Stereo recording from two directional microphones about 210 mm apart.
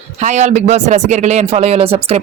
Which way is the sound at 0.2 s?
35° right (ahead or behind).